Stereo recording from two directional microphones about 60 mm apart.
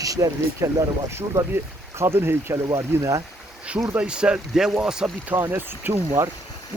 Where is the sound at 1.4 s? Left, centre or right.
Right.